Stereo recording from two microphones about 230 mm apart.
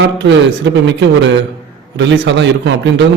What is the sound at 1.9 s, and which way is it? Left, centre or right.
A man's voice, right.